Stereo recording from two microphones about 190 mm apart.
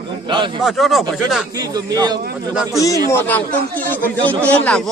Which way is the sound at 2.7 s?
15° left (ahead or behind).